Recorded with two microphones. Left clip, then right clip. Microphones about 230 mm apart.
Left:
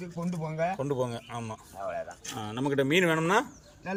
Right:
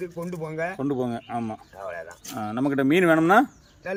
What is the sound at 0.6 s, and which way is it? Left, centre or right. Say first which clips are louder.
A man's voice: right 1 dB; centre.